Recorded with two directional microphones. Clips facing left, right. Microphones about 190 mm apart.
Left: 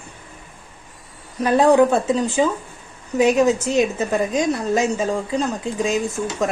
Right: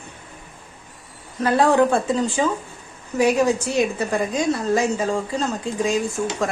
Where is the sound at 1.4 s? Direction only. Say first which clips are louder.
Left 3 dB; 15° left (ahead or behind).